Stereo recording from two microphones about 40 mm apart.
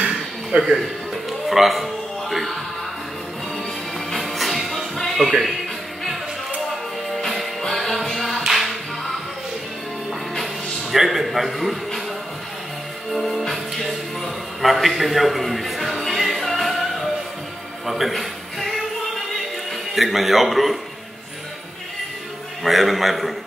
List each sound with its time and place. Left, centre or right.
0.5 s speech: centre
1.5 s speech: centre
4.1 s music: centre
7.7 s music: centre
10.4 s a sound: centre
13.1 s music: centre
17.8 s a sound: centre
19.9 s a man's voice: centre
22.6 s a man's voice: centre